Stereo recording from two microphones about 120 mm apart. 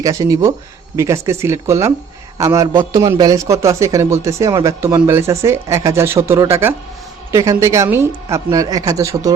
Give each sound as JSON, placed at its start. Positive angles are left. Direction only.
{"t": 0.0, "sound": "a man's voice", "side_deg": -30}